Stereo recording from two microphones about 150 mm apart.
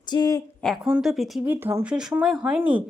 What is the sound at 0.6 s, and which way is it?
Speech, 5° left (ahead or behind).